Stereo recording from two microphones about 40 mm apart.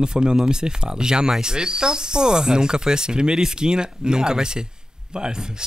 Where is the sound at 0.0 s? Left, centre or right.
Right.